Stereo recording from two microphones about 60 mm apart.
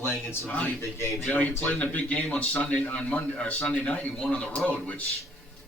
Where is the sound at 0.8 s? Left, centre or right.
Left.